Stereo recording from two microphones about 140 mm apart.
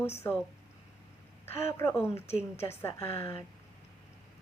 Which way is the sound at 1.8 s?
20° left (ahead or behind).